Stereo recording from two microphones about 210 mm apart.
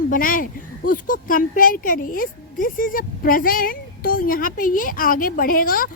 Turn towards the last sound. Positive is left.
turn(degrees=45)  # may be behind; listen again after turning